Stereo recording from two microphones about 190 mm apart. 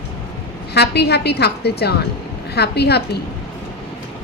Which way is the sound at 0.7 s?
60° left (ahead or behind).